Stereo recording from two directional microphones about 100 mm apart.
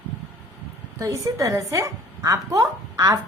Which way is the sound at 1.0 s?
30° right (ahead or behind).